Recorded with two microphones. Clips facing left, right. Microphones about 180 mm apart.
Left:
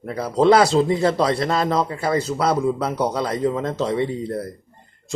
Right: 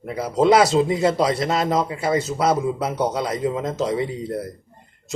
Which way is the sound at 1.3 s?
20° right (ahead or behind).